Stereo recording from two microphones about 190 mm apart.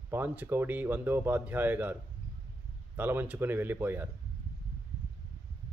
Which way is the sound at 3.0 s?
10° right (ahead or behind).